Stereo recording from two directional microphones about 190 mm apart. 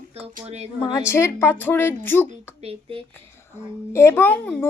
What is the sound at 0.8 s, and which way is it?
A woman's voice, 20° left (ahead or behind).